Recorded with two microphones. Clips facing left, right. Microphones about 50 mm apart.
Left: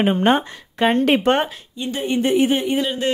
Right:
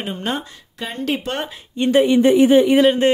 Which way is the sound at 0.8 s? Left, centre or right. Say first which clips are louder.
Left 8 dB; left.